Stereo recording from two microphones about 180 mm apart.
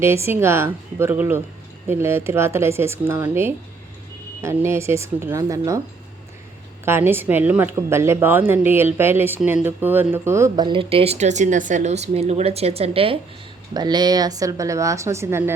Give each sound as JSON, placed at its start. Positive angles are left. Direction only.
{"t": 0.0, "sound": "a woman's voice", "side_deg": -15}
{"t": 6.8, "sound": "a woman's voice", "side_deg": -10}